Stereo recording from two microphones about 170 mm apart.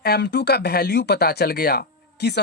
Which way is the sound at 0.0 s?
75° left (ahead or behind).